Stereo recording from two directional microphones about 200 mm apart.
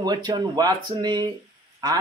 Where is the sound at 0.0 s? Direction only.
20° right (ahead or behind).